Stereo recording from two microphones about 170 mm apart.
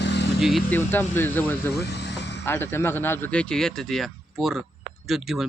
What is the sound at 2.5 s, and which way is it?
Speech, 15° left (ahead or behind).